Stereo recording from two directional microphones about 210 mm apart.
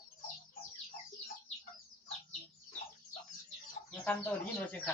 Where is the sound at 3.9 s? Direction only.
10° left (ahead or behind).